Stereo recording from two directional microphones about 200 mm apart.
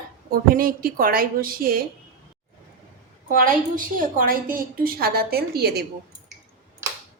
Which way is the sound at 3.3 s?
45° right (ahead or behind).